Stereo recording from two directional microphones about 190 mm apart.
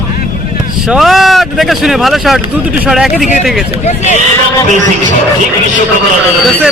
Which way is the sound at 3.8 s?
40° left (ahead or behind).